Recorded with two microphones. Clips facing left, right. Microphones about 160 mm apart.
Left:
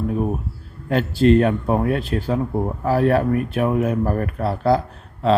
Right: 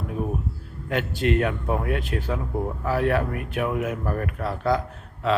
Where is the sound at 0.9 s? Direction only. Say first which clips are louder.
Left 8 dB; 35° left (ahead or behind).